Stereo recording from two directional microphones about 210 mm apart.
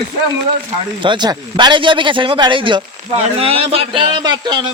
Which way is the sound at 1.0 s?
20° right (ahead or behind).